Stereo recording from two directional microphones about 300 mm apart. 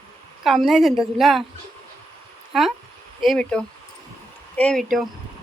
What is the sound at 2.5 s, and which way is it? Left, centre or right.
A woman's voice, centre.